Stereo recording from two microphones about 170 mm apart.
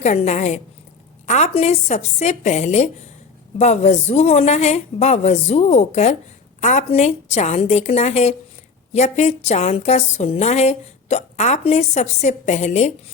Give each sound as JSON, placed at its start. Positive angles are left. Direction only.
{"t": 0.0, "sound": "a woman's voice", "side_deg": 45}